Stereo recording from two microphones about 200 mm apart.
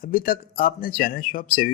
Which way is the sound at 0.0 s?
45° left (ahead or behind).